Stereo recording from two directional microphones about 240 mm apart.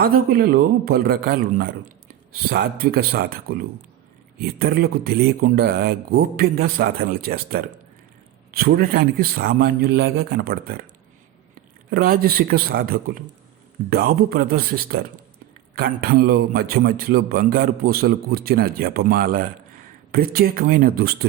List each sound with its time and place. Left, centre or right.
0.0 s a man's voice: right